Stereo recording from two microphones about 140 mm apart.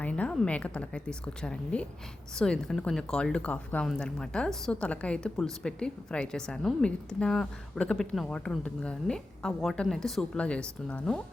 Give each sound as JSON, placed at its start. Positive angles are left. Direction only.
{"t": 0.0, "sound": "speech", "side_deg": 10}